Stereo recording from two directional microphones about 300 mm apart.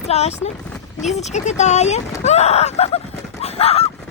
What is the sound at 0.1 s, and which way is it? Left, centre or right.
Speech, left.